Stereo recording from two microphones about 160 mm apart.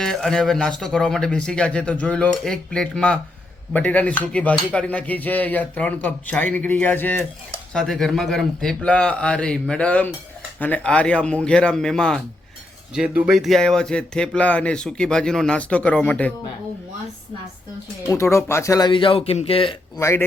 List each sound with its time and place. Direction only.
0.0 s speech: 5° left (ahead or behind)
18.1 s speech: 20° left (ahead or behind); by 19.7 s 35° left (ahead or behind)
20.0 s speech: 15° left (ahead or behind)